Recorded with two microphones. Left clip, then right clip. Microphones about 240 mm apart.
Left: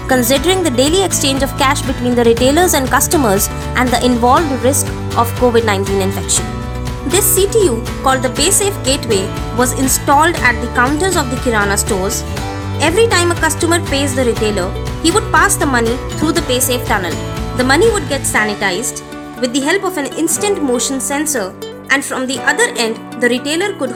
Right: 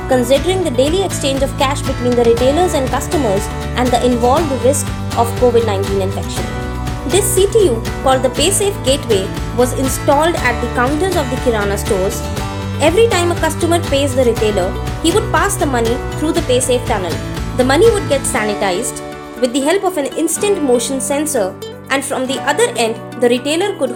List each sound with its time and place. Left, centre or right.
0.1 s speech: left
7.1 s speech: left